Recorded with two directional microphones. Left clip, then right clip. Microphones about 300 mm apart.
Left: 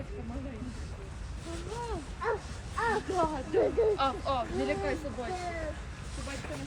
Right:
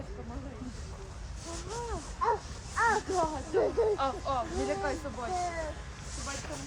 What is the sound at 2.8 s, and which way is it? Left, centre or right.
Speech, right.